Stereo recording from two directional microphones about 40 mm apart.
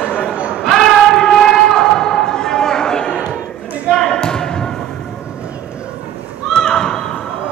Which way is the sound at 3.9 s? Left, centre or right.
Centre.